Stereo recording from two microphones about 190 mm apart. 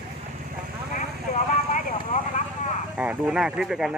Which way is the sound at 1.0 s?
40° left (ahead or behind).